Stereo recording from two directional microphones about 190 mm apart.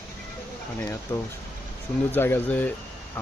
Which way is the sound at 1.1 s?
10° left (ahead or behind).